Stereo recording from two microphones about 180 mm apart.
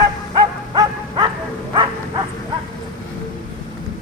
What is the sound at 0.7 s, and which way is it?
Bow-wow, 25° right (ahead or behind).